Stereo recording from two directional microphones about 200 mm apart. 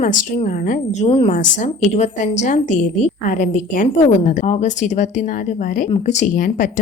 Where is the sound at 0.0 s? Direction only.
40° left (ahead or behind).